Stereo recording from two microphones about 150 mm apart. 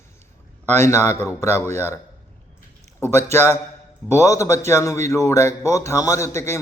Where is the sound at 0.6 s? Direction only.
15° left (ahead or behind).